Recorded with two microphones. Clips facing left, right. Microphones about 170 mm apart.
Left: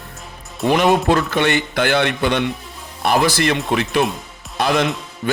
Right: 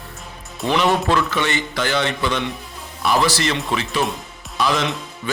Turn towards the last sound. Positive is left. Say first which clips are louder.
# left 5 dB
turn(degrees=45)  # may be behind; listen again after turning